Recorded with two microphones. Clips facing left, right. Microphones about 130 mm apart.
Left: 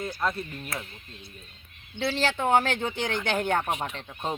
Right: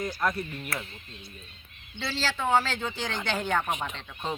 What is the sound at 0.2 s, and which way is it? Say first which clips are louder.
Speech: even; 15° left (ahead or behind).